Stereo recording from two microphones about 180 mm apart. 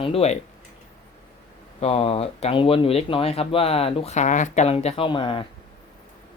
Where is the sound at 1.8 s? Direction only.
35° left (ahead or behind).